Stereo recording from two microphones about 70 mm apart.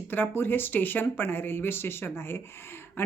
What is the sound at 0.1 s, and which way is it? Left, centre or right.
Speech, left.